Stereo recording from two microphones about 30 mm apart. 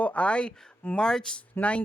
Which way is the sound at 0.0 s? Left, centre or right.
Left.